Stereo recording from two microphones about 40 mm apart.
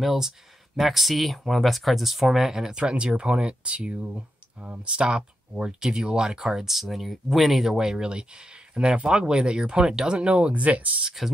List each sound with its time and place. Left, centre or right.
0.0 s speech: centre; by 10.6 s right
10.6 s speech: right